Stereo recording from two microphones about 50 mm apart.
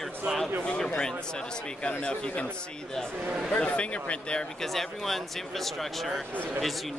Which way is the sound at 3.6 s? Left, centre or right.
Left.